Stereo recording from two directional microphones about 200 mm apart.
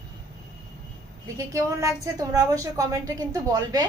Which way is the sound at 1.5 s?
15° right (ahead or behind).